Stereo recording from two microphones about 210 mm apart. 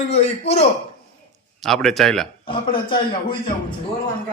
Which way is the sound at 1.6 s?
Centre (ahead or behind).